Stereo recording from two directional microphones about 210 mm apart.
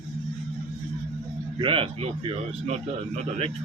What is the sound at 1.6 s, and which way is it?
Speech, 25° right (ahead or behind).